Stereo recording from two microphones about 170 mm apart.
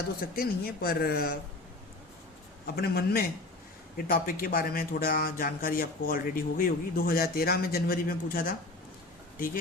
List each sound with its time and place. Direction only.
0.2 s a man's voice: 60° left (ahead or behind)
2.7 s a man's voice: 70° left (ahead or behind)